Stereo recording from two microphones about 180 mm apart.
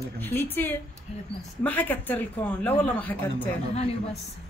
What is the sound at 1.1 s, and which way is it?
Speech, 35° left (ahead or behind).